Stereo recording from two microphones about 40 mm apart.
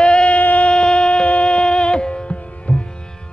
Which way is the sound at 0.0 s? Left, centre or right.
Left.